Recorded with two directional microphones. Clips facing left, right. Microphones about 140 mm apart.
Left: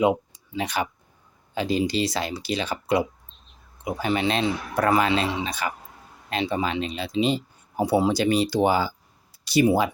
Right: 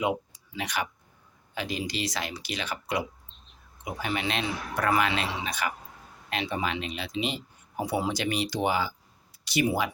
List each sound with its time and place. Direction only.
0.0 s a man's voice: 30° left (ahead or behind)